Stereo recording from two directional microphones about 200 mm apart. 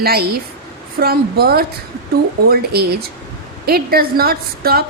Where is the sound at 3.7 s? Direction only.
50° right (ahead or behind).